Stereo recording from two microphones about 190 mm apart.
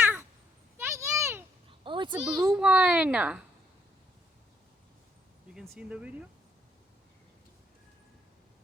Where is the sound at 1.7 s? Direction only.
25° right (ahead or behind).